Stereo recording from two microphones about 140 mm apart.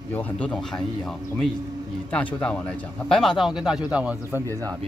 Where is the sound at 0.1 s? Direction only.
10° left (ahead or behind).